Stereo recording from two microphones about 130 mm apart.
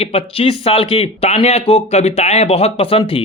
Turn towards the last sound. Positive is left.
turn(degrees=45)  # may be behind; listen again after turning